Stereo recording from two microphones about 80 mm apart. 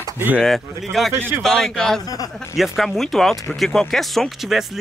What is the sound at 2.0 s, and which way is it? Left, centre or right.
Speech, left.